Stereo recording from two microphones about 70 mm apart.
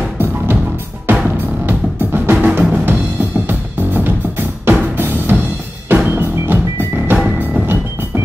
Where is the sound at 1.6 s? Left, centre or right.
Right.